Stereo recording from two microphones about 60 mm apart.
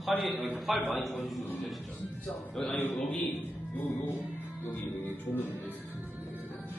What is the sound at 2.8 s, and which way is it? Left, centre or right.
Speech, left.